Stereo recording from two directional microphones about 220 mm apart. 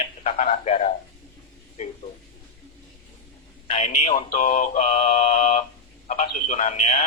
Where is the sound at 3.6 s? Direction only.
30° left (ahead or behind).